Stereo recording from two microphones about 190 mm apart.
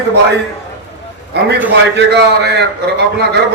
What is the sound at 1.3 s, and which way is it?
A man's voice, 60° right (ahead or behind).